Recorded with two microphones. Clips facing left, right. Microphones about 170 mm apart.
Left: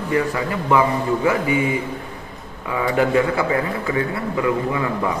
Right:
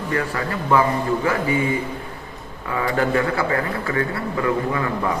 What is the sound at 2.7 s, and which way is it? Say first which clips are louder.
A man's voice: left 2 dB; 15° left (ahead or behind).